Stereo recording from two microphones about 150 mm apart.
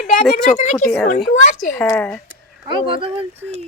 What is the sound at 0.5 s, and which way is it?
Speech, 50° left (ahead or behind).